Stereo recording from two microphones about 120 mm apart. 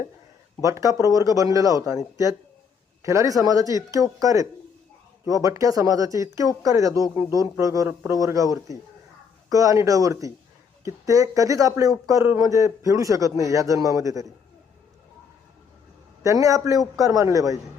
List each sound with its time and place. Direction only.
0.6 s speech: 25° right (ahead or behind)
3.0 s a man's voice: 25° right (ahead or behind)
7.9 s a man's voice: 15° right (ahead or behind)
8.2 s speech: 30° right (ahead or behind)
16.2 s speech: 25° right (ahead or behind)